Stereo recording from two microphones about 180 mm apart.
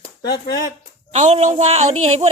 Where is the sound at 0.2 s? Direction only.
65° left (ahead or behind).